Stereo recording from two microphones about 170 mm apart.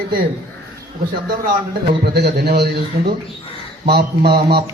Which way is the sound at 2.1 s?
70° right (ahead or behind).